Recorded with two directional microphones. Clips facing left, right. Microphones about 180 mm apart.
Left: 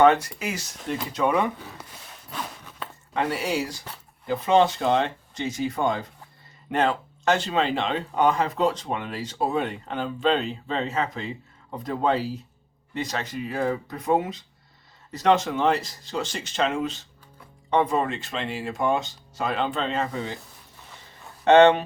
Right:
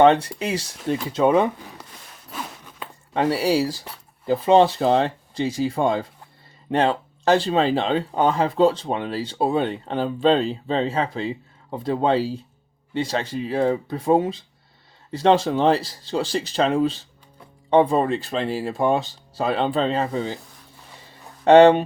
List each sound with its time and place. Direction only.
0.0 s speech: 30° right (ahead or behind)
2.3 s walk: 10° right (ahead or behind)
3.1 s speech: 30° right (ahead or behind)
21.4 s speech: 35° right (ahead or behind)